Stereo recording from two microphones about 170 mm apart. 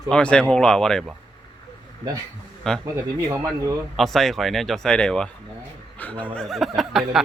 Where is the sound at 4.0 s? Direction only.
Centre (ahead or behind).